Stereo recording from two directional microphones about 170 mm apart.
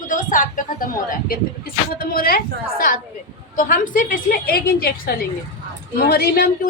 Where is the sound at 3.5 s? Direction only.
55° left (ahead or behind).